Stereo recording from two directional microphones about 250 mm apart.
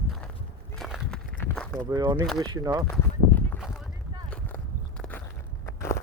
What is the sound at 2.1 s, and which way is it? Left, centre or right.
Speech, centre.